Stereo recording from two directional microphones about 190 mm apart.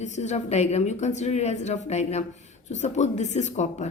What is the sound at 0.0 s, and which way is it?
A woman's voice, 40° left (ahead or behind).